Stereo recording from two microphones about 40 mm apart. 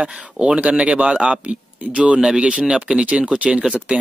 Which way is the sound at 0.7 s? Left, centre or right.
Right.